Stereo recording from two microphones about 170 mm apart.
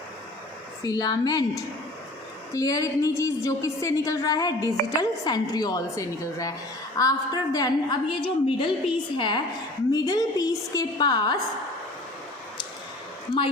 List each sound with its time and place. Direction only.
0.8 s a woman's voice: 25° left (ahead or behind)